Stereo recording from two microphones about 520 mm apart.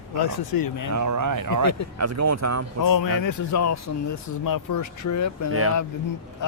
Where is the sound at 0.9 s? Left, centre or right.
Right.